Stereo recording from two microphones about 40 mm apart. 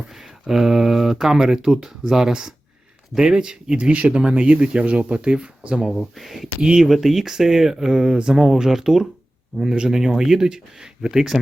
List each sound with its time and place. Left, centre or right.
0.0 s speech: centre; by 5.8 s right
6.1 s speech: centre
6.6 s speech: centre
6.8 s speech: centre